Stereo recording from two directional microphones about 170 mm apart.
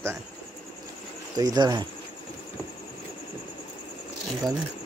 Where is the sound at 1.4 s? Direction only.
25° right (ahead or behind).